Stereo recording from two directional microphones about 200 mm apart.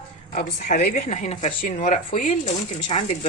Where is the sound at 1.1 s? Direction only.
35° left (ahead or behind).